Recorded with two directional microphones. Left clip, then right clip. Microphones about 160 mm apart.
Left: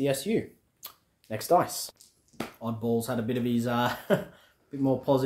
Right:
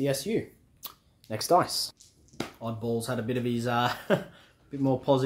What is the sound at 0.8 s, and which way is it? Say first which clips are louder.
Speech: right 1 dB; 30° right (ahead or behind).